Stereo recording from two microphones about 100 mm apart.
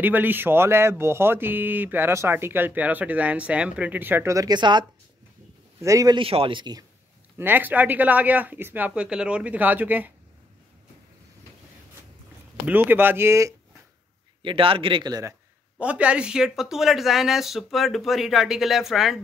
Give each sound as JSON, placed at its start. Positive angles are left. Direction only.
{"t": 0.0, "sound": "speech", "side_deg": -20}
{"t": 4.3, "sound": "a woman's voice", "side_deg": -35}
{"t": 4.6, "sound": "speech", "side_deg": -50}
{"t": 5.8, "sound": "a man's voice", "side_deg": -35}
{"t": 6.1, "sound": "speech", "side_deg": -65}
{"t": 7.3, "sound": "speech", "side_deg": -20}
{"t": 12.6, "sound": "speech", "side_deg": -20}
{"t": 14.4, "sound": "speech", "side_deg": -60}
{"t": 15.8, "sound": "speech", "side_deg": -10}